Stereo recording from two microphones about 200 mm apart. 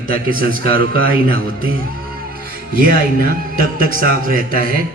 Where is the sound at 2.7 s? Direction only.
45° right (ahead or behind).